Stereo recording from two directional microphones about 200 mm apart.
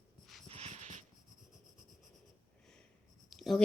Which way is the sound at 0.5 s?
35° right (ahead or behind).